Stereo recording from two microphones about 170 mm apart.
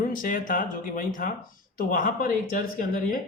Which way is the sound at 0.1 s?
50° left (ahead or behind).